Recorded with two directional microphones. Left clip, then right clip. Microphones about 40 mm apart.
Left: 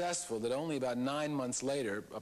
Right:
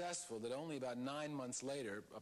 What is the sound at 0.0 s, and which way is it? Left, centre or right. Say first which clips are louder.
Speech: left 10 dB; left.